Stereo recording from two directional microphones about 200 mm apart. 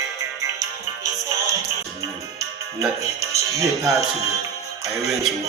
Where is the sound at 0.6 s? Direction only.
15° right (ahead or behind).